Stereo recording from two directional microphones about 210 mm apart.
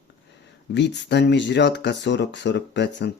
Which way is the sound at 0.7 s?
55° left (ahead or behind).